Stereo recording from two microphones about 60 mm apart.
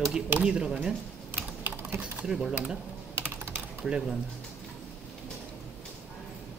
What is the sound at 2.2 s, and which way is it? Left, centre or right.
Speech, centre.